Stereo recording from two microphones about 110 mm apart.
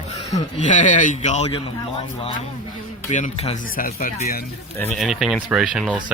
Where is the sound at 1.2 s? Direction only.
85° left.